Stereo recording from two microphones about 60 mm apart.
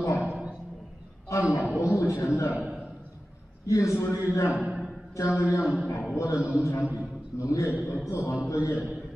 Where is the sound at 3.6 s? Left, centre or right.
Left.